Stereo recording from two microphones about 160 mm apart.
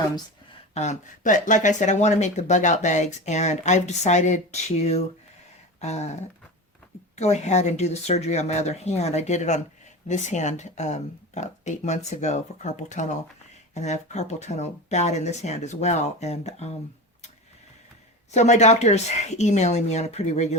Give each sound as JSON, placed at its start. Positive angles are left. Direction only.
{"t": 0.7, "sound": "speech", "side_deg": 45}
{"t": 7.2, "sound": "speech", "side_deg": 45}
{"t": 18.3, "sound": "speech", "side_deg": 45}